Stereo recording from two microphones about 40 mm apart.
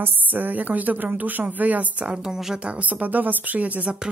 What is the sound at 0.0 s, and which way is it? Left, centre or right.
Speech, right.